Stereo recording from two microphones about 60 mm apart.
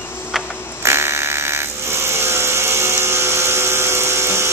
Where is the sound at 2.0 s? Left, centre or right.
Right.